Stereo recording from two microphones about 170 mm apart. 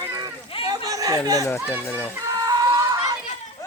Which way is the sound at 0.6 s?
20° right (ahead or behind).